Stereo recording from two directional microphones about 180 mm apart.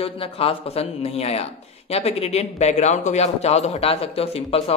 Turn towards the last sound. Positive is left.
turn(degrees=35)  # may be behind; listen again after turning